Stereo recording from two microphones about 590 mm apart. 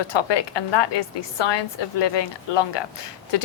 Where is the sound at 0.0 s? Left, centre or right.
Left.